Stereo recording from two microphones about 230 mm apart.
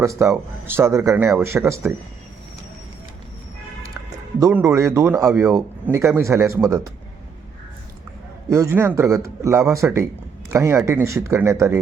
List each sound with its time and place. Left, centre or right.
0.0 s speech: centre
4.4 s speech: centre
8.4 s speech: centre